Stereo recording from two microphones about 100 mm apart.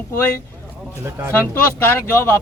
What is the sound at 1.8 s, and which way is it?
Speech, 20° left (ahead or behind).